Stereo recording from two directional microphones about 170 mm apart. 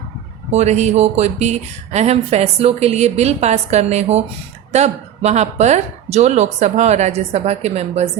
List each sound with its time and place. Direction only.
0.5 s speech: 40° right (ahead or behind)